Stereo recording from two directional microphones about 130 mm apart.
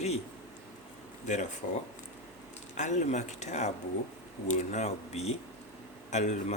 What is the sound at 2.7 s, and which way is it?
Speech, 65° left (ahead or behind).